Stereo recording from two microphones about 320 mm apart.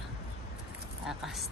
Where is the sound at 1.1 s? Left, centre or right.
Centre.